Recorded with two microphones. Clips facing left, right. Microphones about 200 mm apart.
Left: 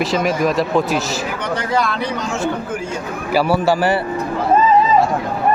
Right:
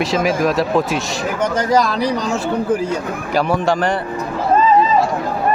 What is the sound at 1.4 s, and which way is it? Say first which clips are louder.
Speech: right 5 dB; 45° right (ahead or behind).